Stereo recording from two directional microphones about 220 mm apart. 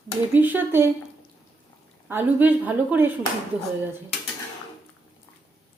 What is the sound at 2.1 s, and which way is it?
A woman's voice, 10° right (ahead or behind).